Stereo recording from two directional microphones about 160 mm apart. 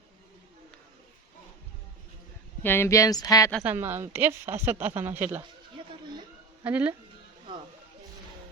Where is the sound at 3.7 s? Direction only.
15° right (ahead or behind).